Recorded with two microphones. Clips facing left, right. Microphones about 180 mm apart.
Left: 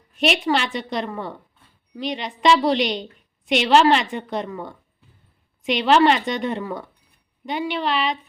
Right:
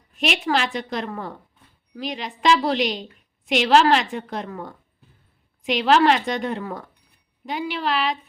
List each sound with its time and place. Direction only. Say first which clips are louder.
0.1 s a woman's voice: left 2 dB; centre (ahead or behind)